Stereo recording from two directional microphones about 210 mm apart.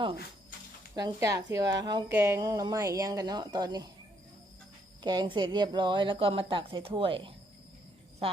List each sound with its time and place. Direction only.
0.9 s a woman's voice: 15° right (ahead or behind)
5.0 s a woman's voice: 20° right (ahead or behind)